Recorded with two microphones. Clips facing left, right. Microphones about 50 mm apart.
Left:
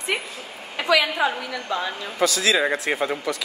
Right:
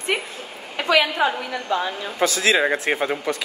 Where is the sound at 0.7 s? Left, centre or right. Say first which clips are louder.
Right 1 dB; right.